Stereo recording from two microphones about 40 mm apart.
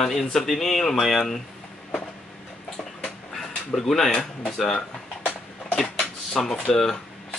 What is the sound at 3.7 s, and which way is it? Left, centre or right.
Speech, centre.